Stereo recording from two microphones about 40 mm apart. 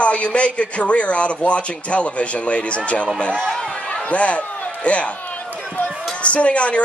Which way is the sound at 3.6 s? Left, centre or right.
Left.